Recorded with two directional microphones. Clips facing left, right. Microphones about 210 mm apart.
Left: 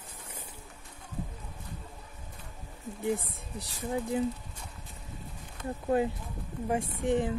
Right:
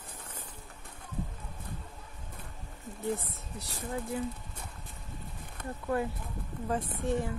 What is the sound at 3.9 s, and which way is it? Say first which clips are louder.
Speech: left 4 dB; 15° left (ahead or behind).